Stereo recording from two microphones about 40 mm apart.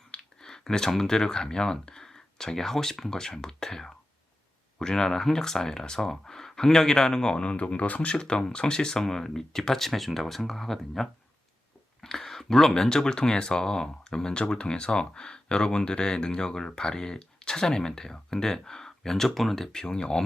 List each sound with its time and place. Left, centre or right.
0.2 s speech: centre
7.5 s speech: left
8.1 s speech: left